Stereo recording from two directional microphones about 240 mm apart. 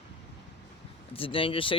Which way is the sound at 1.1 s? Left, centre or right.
Left.